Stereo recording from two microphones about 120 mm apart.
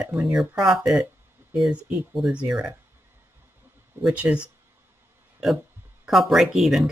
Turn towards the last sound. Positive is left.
turn(degrees=0)  # may be behind; listen again after turning